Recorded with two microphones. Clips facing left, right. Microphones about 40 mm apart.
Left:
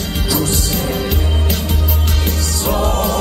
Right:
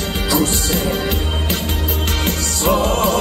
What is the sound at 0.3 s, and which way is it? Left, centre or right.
Music, right.